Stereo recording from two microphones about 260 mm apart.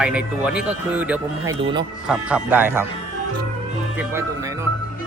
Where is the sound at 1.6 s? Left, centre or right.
Centre.